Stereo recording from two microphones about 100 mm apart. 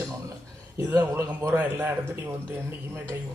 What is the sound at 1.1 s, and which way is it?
Speech, 30° right (ahead or behind).